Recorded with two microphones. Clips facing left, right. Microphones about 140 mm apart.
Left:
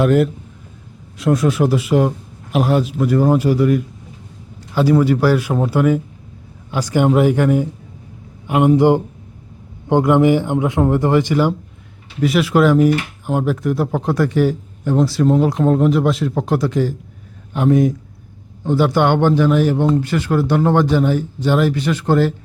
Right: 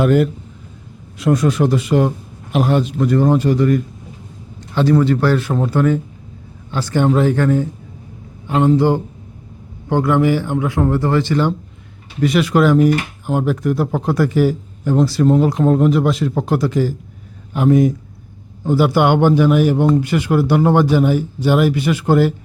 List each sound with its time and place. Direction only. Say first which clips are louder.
0.0 s a man's voice: even; centre (ahead or behind)